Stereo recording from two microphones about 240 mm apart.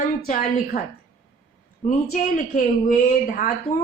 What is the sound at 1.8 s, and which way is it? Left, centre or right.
Speech, left.